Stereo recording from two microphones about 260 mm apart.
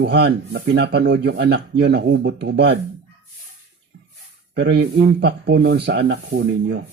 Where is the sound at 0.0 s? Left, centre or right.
Right.